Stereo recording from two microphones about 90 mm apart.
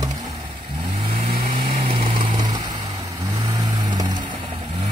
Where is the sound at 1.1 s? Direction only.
80° right.